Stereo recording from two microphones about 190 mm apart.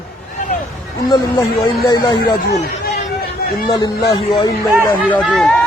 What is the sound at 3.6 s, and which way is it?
Speech, 20° left (ahead or behind).